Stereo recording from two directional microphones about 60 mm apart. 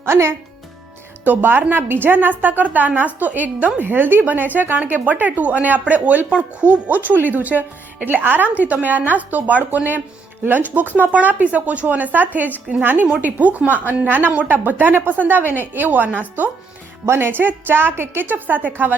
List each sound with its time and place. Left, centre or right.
0.0 s speech: right
1.2 s a woman's voice: right